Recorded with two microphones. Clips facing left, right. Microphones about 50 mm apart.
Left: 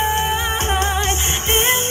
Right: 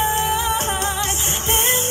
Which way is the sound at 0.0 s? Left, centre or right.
Left.